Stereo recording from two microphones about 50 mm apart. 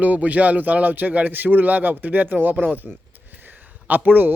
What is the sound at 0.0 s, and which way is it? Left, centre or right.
Speech, right.